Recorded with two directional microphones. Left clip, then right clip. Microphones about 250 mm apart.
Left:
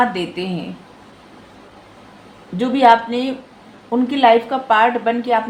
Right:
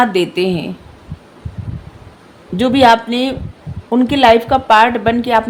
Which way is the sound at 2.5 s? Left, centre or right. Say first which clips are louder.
Right 2 dB; right.